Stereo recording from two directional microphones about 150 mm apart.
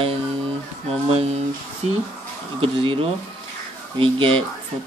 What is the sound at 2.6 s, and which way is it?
Mantra, 35° right (ahead or behind).